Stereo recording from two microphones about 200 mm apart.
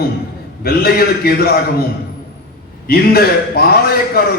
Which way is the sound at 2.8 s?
50° left (ahead or behind).